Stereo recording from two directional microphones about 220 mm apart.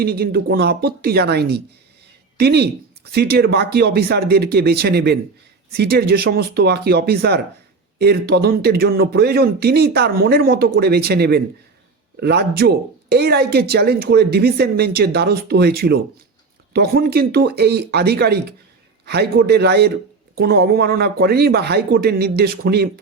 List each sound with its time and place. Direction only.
0.0 s speech: 45° right (ahead or behind)